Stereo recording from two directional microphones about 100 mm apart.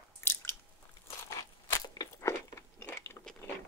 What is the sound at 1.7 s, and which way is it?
Crunch, 30° left (ahead or behind).